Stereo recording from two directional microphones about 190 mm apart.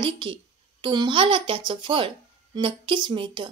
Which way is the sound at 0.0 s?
25° right (ahead or behind).